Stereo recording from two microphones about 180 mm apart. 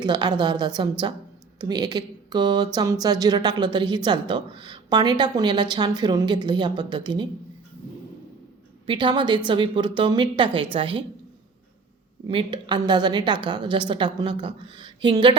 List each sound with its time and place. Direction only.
0.0 s a woman's voice: 25° right (ahead or behind)
8.9 s a woman's voice: 25° right (ahead or behind)
12.3 s a woman's voice: 25° right (ahead or behind)